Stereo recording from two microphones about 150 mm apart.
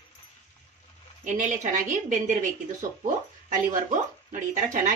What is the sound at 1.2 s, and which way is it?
Speech, 55° right (ahead or behind).